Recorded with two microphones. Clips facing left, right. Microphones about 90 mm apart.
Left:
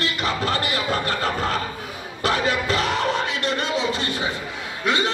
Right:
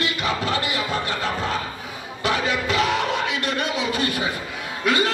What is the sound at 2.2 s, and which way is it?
Speech, 40° left (ahead or behind).